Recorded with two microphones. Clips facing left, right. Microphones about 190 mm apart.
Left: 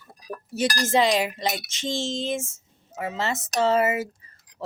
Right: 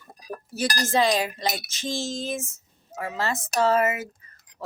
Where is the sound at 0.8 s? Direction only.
25° left (ahead or behind).